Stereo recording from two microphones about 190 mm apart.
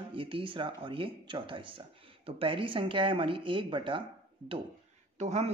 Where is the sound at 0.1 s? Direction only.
25° right (ahead or behind).